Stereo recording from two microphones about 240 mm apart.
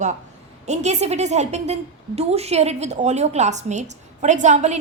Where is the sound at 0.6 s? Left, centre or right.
Right.